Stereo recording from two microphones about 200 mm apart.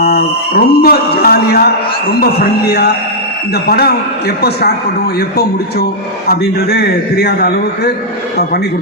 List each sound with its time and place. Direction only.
0.0 s speech: 50° left (ahead or behind)
6.2 s speech: 50° left (ahead or behind)